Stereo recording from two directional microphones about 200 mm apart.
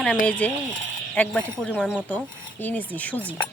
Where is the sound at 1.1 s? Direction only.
5° left (ahead or behind).